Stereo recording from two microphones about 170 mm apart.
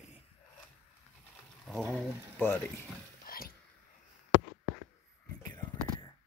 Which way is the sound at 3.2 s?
60° left (ahead or behind).